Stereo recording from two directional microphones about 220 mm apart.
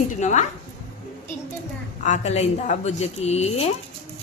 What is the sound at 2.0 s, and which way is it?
A woman's voice, 30° left (ahead or behind).